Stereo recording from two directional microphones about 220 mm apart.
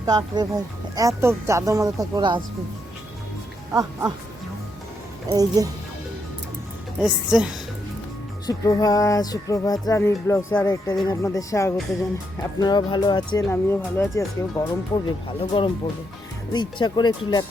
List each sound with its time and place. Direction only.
0.0 s speech: 20° right (ahead or behind)
3.7 s speech: 10° right (ahead or behind)
5.3 s speech: 15° right (ahead or behind)
7.0 s a woman's voice: 5° right (ahead or behind)
8.4 s music: 15° left (ahead or behind)
12.4 s speech: 15° left (ahead or behind)
13.4 s music: 10° left (ahead or behind)
15.3 s speech: 25° left (ahead or behind)